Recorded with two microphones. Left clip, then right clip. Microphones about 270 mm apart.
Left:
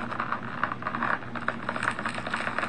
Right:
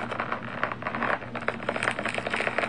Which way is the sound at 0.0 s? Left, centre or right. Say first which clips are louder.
Even; right.